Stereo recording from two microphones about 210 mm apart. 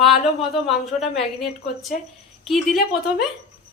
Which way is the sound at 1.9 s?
40° left (ahead or behind).